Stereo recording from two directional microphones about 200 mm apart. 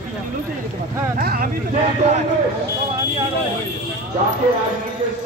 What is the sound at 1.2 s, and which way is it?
Vehicle, 50° right (ahead or behind).